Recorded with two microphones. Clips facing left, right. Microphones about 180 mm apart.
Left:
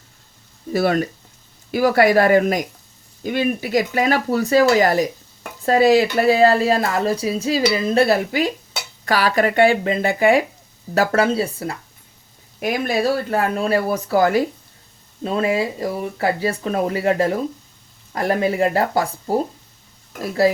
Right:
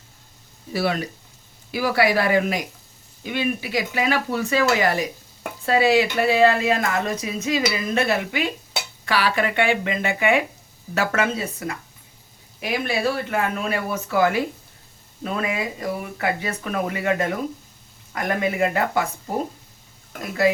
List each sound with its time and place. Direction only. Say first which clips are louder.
0.7 s speech: left 5 dB; 45° left (ahead or behind)
12.5 s speech: left 4 dB; 45° left (ahead or behind)